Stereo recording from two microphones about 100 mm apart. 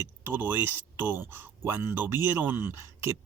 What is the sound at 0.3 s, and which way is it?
Speech, 20° right (ahead or behind).